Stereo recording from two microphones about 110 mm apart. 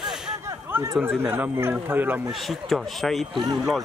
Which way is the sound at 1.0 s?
20° right (ahead or behind).